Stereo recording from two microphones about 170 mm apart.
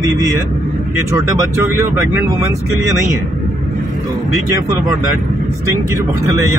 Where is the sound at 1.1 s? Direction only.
20° right (ahead or behind).